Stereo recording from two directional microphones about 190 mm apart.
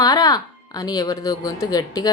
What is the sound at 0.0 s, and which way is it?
Speech, 20° left (ahead or behind).